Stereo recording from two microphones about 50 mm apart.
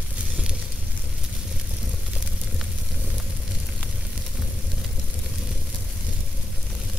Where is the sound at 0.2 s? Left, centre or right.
Centre.